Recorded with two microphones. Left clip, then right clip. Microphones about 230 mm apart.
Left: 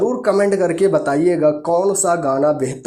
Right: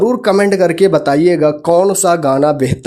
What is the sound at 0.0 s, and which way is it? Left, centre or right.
Speech, right.